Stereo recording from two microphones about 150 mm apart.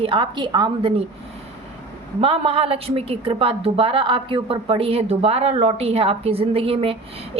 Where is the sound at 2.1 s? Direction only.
40° right (ahead or behind).